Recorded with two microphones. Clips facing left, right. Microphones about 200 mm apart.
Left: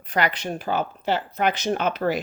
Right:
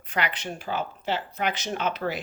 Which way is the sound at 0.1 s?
40° left (ahead or behind).